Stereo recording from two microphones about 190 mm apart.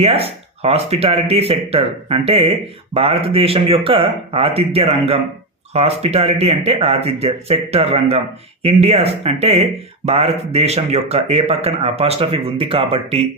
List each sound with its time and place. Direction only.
0.0 s speech: 30° right (ahead or behind)